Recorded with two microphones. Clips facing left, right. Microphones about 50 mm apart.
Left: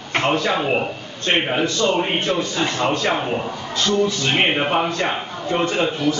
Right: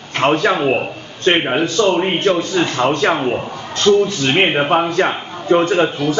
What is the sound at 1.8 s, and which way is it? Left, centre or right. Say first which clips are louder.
Speech: right 5 dB; right.